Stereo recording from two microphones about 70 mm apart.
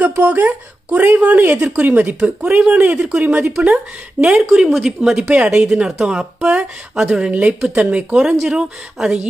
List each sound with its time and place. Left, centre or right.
0.0 s speech: right